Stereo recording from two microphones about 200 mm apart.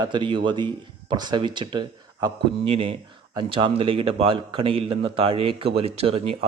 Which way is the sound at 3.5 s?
25° right (ahead or behind).